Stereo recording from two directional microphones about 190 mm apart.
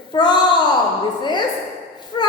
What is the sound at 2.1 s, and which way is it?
Whimper, 20° left (ahead or behind).